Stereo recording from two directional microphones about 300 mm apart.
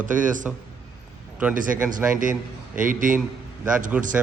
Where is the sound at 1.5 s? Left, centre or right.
Right.